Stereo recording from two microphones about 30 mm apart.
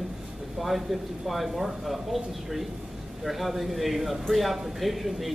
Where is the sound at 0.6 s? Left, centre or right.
Centre.